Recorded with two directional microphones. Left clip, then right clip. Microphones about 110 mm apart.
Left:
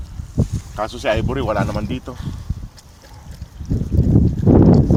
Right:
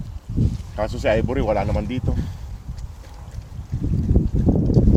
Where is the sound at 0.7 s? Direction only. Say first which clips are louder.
Even; 45° right (ahead or behind).